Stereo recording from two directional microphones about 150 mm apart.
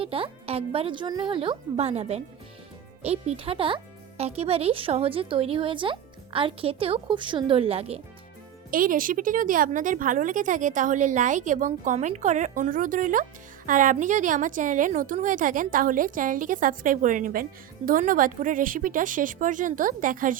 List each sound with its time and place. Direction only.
0.0 s a woman's voice: 40° right (ahead or behind)
8.7 s a woman's voice: 65° right (ahead or behind)